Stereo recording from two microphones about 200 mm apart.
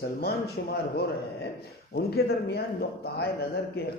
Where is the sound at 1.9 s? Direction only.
55° left (ahead or behind).